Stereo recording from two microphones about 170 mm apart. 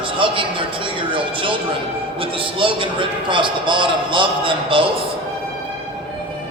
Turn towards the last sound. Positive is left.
turn(degrees=-30)  # may be behind; listen again after turning